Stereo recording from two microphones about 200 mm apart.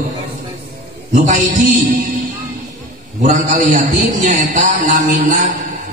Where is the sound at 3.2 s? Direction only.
40° right (ahead or behind).